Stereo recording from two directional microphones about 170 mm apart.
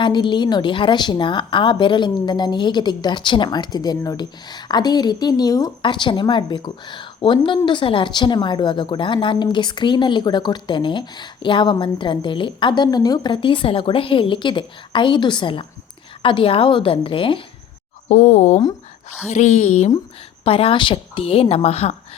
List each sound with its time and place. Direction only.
0.0 s a woman's voice: 25° left (ahead or behind)
18.1 s a woman's voice: 45° left (ahead or behind)